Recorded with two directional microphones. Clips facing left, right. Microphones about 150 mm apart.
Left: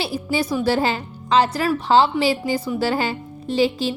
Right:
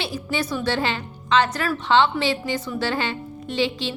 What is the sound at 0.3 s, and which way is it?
A woman's voice, 30° left (ahead or behind).